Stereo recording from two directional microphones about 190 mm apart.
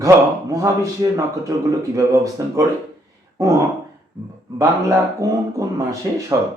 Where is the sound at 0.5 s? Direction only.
15° right (ahead or behind).